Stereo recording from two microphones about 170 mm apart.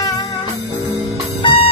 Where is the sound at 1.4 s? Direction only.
35° left (ahead or behind).